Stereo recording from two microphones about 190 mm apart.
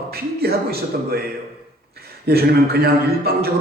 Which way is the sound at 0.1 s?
55° right (ahead or behind).